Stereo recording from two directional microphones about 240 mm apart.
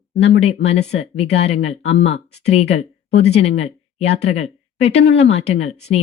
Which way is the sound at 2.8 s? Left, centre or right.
Left.